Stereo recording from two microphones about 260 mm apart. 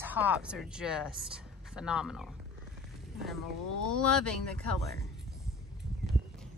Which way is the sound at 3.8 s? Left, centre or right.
Centre.